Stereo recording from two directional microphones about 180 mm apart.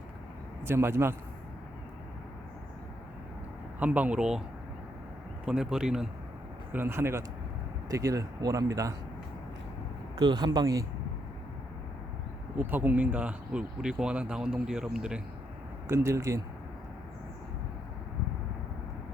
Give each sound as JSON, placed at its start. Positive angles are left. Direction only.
{"t": 0.6, "sound": "speech", "side_deg": -15}
{"t": 3.8, "sound": "speech", "side_deg": -10}
{"t": 5.5, "sound": "speech", "side_deg": -5}
{"t": 10.2, "sound": "speech", "side_deg": -25}
{"t": 12.7, "sound": "speech", "side_deg": -10}
{"t": 15.9, "sound": "speech", "side_deg": -15}